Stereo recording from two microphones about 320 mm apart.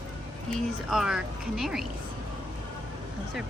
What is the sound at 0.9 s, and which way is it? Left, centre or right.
Speech, centre.